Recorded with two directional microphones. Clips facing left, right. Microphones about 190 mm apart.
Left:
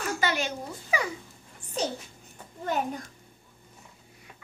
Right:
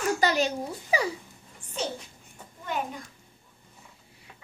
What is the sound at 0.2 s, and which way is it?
Speech, 35° right (ahead or behind).